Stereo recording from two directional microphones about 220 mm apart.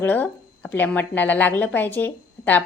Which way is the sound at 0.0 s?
5° left (ahead or behind).